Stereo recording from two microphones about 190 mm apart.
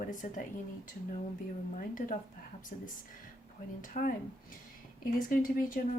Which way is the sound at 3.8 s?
45° left (ahead or behind).